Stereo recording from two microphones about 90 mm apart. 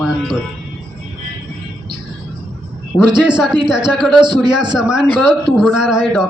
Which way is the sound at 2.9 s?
5° right (ahead or behind).